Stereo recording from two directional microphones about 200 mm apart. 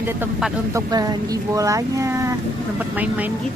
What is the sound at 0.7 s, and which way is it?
Speech, 20° right (ahead or behind).